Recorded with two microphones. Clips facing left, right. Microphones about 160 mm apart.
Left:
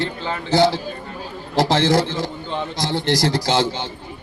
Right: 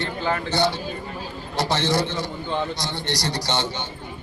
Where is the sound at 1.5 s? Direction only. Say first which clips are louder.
Left 6 dB; 90° left.